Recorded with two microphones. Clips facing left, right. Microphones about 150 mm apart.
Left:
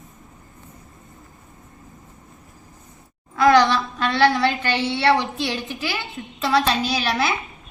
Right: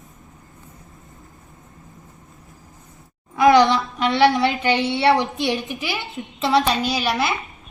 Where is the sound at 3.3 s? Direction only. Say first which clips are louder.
Right 2 dB; 15° right (ahead or behind).